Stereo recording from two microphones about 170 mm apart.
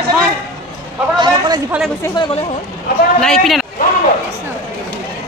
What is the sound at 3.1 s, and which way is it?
Speech, 5° left (ahead or behind).